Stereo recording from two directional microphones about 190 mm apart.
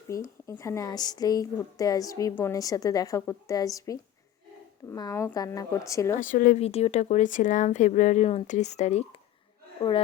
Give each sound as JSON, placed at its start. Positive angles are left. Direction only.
{"t": 0.1, "sound": "a woman's voice", "side_deg": 15}
{"t": 6.1, "sound": "speech", "side_deg": 45}
{"t": 6.6, "sound": "speech", "side_deg": 35}